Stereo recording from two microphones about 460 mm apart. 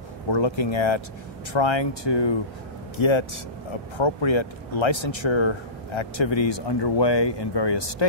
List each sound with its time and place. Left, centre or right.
0.3 s speech: left
3.0 s speech: left
4.0 s speech: left